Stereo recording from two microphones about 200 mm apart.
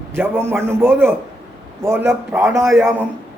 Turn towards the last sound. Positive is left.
turn(degrees=-5)  # may be behind; listen again after turning